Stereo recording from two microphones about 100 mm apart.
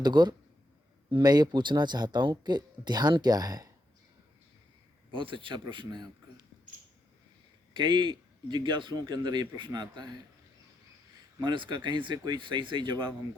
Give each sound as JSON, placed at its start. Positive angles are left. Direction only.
{"t": 0.0, "sound": "speech", "side_deg": -45}
{"t": 5.1, "sound": "a man's voice", "side_deg": -60}
{"t": 7.7, "sound": "speech", "side_deg": -50}
{"t": 11.4, "sound": "speech", "side_deg": -50}